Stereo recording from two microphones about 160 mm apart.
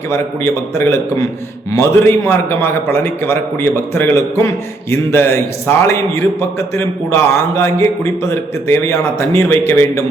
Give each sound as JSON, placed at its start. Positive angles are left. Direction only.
{"t": 0.1, "sound": "a man's voice", "side_deg": 15}